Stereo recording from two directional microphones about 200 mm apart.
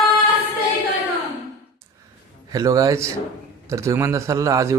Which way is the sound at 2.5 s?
15° right (ahead or behind).